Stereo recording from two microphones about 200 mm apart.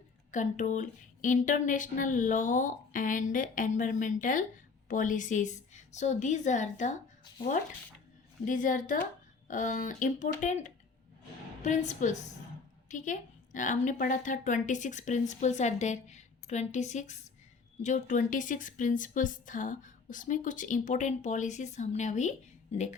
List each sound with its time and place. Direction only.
0.3 s a woman's voice: 40° left (ahead or behind)
8.4 s a woman's voice: 40° left (ahead or behind)